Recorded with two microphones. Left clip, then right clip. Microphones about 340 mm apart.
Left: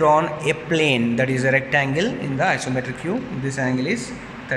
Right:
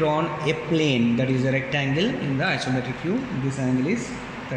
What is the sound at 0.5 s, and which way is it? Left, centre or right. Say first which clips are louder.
A man's voice: left 3 dB; left.